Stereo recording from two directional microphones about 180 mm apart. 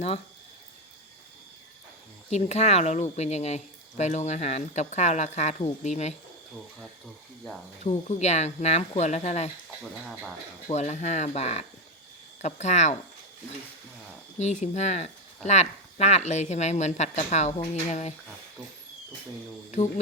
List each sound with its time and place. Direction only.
2.3 s speech: 40° left (ahead or behind)
7.9 s speech: 40° left (ahead or behind)
10.7 s speech: 40° left (ahead or behind)
14.3 s speech: 40° left (ahead or behind)